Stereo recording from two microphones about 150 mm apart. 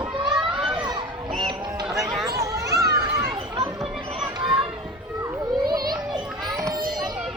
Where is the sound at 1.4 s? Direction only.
30° right (ahead or behind).